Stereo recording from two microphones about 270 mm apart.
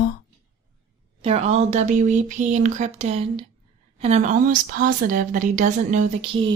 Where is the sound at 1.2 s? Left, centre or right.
Right.